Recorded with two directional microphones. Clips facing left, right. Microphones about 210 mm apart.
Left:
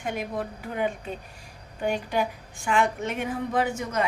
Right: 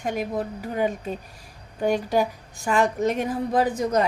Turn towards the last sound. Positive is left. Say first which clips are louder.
# right 5 dB
turn(degrees=-35)  # may be behind; listen again after turning